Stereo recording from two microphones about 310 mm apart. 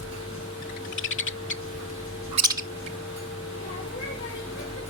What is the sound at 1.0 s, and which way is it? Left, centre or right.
Owl, left.